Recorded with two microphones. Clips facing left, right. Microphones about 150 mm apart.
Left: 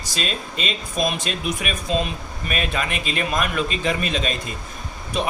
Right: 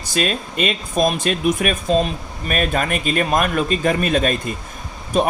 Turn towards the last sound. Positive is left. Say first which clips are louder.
# right 6 dB
turn(degrees=-45)  # may be behind; listen again after turning